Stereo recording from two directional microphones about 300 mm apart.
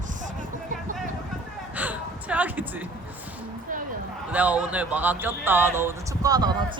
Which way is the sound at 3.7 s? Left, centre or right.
Right.